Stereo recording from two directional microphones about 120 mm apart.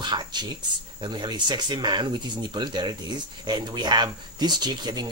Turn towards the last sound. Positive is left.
turn(degrees=-35)  # may be behind; listen again after turning